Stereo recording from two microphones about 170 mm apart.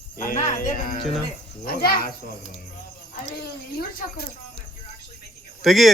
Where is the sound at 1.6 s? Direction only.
65° left (ahead or behind).